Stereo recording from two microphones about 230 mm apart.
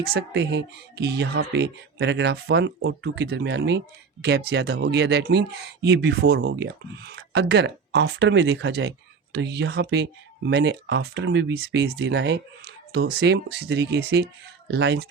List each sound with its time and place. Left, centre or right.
0.0 s speech: right